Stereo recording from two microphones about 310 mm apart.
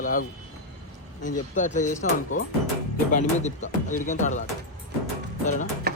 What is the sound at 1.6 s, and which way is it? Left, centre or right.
Speech, left.